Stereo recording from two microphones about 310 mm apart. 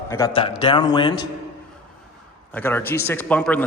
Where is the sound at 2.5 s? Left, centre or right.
Centre.